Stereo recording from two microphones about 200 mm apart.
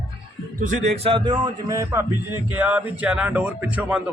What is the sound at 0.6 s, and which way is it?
A man's voice, 25° right (ahead or behind).